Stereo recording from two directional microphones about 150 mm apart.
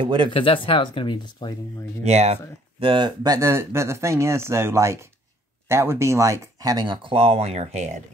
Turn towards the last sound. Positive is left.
turn(degrees=-50)  # may be behind; listen again after turning